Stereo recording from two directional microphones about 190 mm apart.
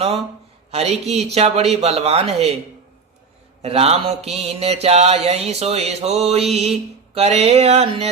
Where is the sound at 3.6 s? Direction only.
30° right (ahead or behind).